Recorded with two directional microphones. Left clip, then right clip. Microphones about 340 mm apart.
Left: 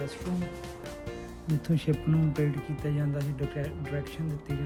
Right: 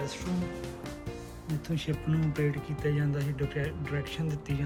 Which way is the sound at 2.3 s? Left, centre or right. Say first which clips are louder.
Even; centre.